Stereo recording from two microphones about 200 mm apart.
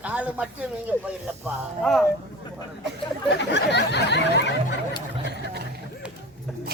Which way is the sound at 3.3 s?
60° left (ahead or behind).